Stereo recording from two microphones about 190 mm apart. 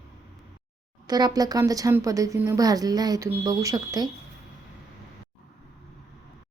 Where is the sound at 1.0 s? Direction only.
20° right (ahead or behind).